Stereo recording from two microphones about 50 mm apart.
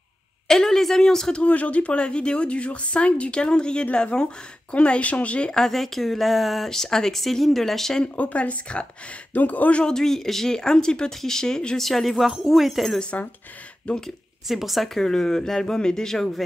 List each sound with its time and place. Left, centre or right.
0.5 s a sound: centre
1.4 s speech: left
5.6 s speech: centre
8.2 s speech: left
9.8 s speech: centre
13.8 s speech: centre
14.5 s speech: centre
15.0 s speech: centre